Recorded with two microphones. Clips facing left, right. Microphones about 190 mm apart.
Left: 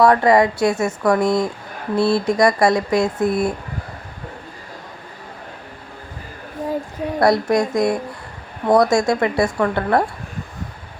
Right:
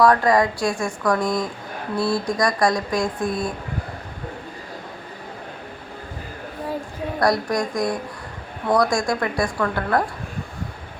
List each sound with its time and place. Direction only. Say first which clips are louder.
0.0 s speech: left 3 dB; 25° left (ahead or behind)
7.2 s speech: left 5 dB; 25° left (ahead or behind)